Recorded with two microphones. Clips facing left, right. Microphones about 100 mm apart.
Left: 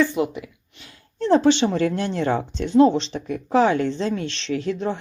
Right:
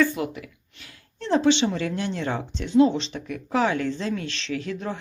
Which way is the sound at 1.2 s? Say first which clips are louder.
Left 4 dB; 40° left (ahead or behind).